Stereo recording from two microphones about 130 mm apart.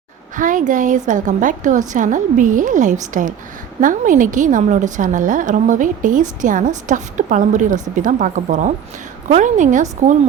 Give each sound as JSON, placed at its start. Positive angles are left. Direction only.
{"t": 0.3, "sound": "a woman's voice", "side_deg": -90}